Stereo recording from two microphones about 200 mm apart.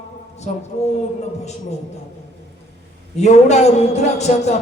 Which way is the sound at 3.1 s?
35° left (ahead or behind).